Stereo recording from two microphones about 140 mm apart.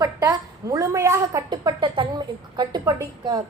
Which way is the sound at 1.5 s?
35° right (ahead or behind).